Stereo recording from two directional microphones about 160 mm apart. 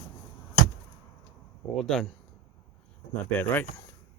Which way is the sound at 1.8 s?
5° left (ahead or behind).